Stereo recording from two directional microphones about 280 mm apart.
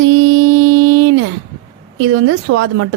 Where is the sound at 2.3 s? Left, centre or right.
Right.